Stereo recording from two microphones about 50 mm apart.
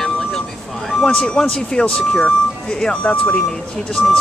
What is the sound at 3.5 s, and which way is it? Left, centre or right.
Speech, centre.